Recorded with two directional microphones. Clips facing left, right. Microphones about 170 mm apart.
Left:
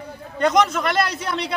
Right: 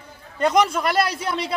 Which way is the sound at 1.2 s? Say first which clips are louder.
Even; 5° right (ahead or behind).